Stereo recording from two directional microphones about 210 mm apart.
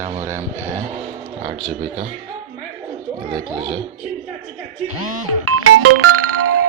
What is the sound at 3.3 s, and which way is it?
Speech, 25° right (ahead or behind).